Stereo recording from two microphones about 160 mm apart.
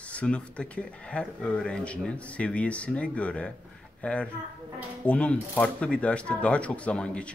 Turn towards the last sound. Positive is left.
turn(degrees=5)  # may be behind; listen again after turning